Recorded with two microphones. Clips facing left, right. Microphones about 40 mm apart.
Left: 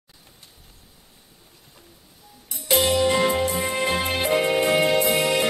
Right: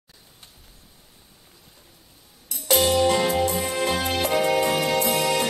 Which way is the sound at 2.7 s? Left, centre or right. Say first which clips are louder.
Even; centre.